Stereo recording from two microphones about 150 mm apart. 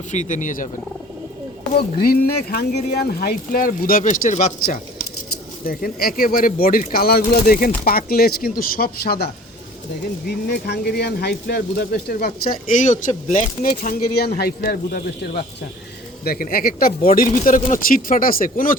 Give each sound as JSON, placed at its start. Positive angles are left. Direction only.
{"t": 0.1, "sound": "speech", "side_deg": 55}
{"t": 1.7, "sound": "speech", "side_deg": 90}
{"t": 5.6, "sound": "speech", "side_deg": 80}